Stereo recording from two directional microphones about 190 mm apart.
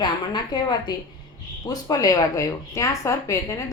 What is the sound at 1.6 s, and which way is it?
Speech, 20° left (ahead or behind).